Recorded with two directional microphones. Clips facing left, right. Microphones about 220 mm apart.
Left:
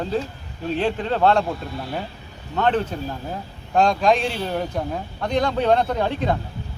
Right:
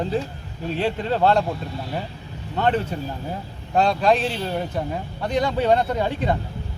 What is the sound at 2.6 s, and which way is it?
Speech, 5° right (ahead or behind).